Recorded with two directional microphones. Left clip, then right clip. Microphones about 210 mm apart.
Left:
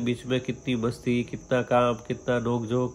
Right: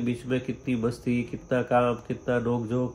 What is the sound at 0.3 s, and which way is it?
A man's voice, 15° left (ahead or behind).